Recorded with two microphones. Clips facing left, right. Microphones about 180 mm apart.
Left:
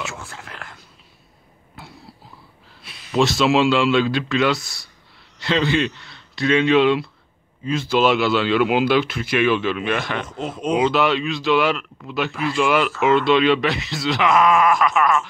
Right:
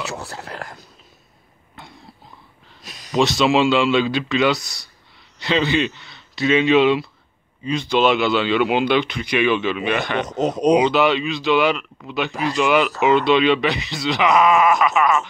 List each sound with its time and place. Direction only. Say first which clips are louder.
0.0 s a sound: right 3 dB; 35° right (ahead or behind)
1.8 s cough: left 1 dB; 5° left (ahead or behind)
2.8 s a sound: right 2 dB; 40° right (ahead or behind)
3.2 s speech: even; centre (ahead or behind)
10.4 s speech: right 8 dB; 40° right (ahead or behind)
10.8 s speech: right 1 dB; centre (ahead or behind)
12.3 s speech: right 1 dB; 40° right (ahead or behind)
12.5 s speech: right 1 dB; centre (ahead or behind)